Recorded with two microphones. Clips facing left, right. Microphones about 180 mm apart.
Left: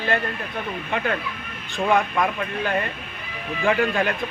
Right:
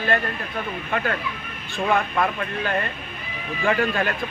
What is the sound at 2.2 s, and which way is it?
A man's voice, 10° left (ahead or behind).